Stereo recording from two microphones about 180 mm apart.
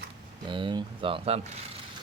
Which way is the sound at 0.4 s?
25° right (ahead or behind).